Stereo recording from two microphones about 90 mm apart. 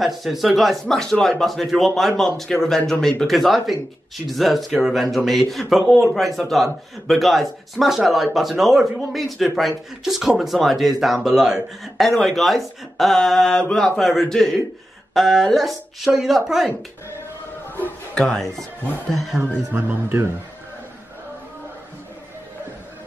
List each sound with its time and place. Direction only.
0.0 s speech: centre (ahead or behind)
17.7 s speech: 15° left (ahead or behind)
19.7 s speech: 25° right (ahead or behind)